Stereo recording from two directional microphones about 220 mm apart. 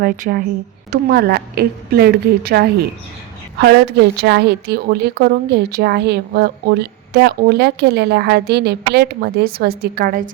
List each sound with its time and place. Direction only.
0.0 s a woman's voice: 40° right (ahead or behind)